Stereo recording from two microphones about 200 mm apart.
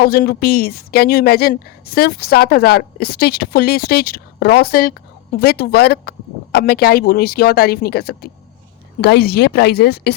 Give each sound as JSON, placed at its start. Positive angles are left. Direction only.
{"t": 0.0, "sound": "speech", "side_deg": 50}